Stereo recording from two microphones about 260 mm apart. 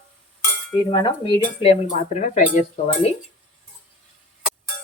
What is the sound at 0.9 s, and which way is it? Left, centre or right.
Speech, centre.